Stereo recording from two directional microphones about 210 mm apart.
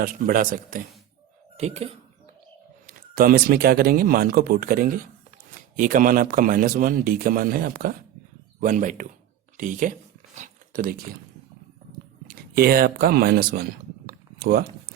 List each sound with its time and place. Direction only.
0.0 s a man's voice: 40° right (ahead or behind)
1.5 s a man's voice: 30° right (ahead or behind)
2.8 s a man's voice: 40° right (ahead or behind)
9.6 s a sound: 40° right (ahead or behind)
12.3 s speech: 45° right (ahead or behind)
14.1 s a sound: 45° right (ahead or behind)